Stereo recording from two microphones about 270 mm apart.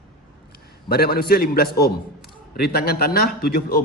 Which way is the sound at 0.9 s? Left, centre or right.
Left.